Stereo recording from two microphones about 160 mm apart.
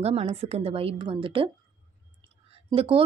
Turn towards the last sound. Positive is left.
turn(degrees=-35)  # may be behind; listen again after turning